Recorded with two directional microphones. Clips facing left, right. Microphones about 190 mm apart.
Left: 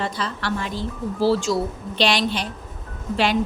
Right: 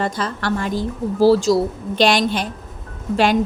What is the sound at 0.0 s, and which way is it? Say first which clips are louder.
A woman's voice: right 4 dB; 45° right (ahead or behind).